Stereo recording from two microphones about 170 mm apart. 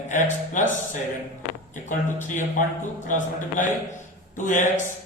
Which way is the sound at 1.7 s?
50° left (ahead or behind).